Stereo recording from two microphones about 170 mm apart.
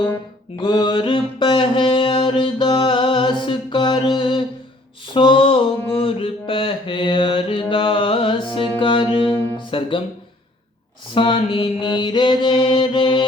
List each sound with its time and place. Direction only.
0.6 s mantra: 25° left (ahead or behind)
5.0 s a sound: 30° left (ahead or behind)
7.7 s music: 30° left (ahead or behind)
9.6 s speech: 30° left (ahead or behind)
11.1 s mantra: 30° left (ahead or behind)